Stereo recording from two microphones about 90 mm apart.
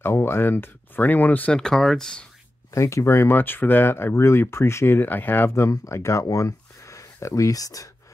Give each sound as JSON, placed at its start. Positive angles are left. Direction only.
{"t": 0.0, "sound": "speech", "side_deg": 25}
{"t": 1.6, "sound": "speech", "side_deg": 5}
{"t": 2.7, "sound": "speech", "side_deg": 35}